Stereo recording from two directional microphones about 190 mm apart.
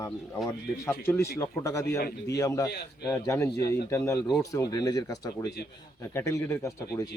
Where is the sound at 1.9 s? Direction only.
55° left (ahead or behind).